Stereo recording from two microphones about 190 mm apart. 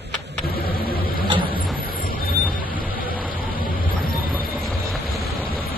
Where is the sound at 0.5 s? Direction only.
50° left (ahead or behind).